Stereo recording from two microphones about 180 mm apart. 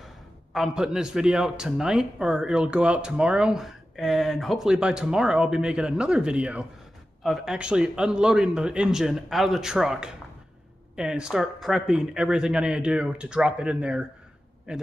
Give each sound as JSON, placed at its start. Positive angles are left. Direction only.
{"t": 0.0, "sound": "a man's voice", "side_deg": 0}